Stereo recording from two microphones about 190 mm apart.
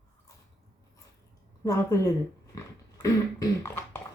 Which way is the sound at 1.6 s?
15° left (ahead or behind).